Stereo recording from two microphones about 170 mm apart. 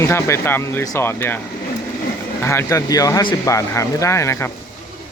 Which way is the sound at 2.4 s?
15° left (ahead or behind).